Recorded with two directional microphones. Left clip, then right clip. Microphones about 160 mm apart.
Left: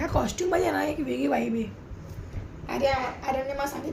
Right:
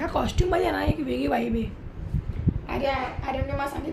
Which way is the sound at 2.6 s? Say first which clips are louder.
Left 2 dB; 15° left (ahead or behind).